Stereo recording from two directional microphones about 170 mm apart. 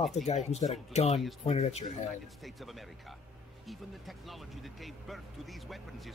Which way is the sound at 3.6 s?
Centre (ahead or behind).